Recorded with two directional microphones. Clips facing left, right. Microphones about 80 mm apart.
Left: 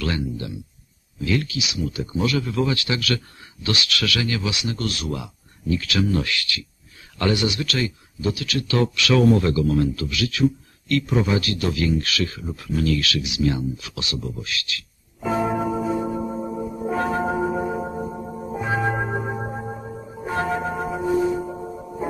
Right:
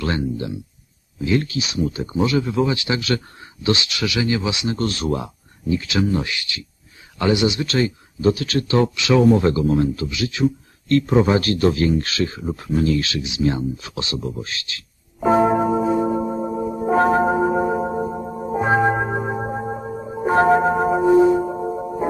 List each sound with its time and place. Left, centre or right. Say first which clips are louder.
0.0 s speech: right 3 dB; right
15.2 s church bell: right 7 dB; right
15.5 s singing bowl: right 5 dB; right
18.9 s music: right 4 dB; right
21.1 s singing bowl: right 7 dB; right